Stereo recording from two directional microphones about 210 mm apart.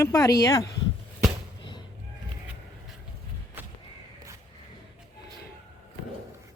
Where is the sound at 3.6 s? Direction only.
10° right (ahead or behind).